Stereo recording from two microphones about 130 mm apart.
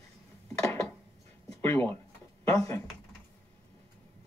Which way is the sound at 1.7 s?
15° left (ahead or behind).